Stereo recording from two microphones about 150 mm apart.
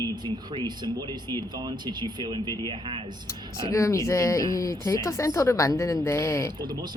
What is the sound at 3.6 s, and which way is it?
Speech, 20° left (ahead or behind).